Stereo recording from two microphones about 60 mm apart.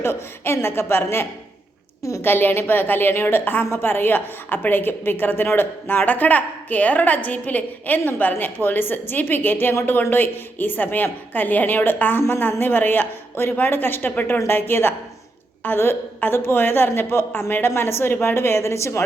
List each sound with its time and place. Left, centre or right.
0.0 s a woman's voice: left
2.0 s a woman's voice: left
2.2 s a woman's voice: left